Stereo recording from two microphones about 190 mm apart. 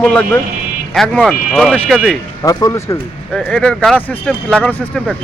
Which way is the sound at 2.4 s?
20° left (ahead or behind).